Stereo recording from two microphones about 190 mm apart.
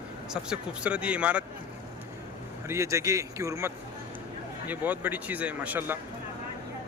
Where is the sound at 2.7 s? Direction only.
15° right (ahead or behind).